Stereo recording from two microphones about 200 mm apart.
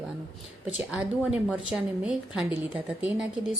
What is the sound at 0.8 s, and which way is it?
Speech, centre (ahead or behind).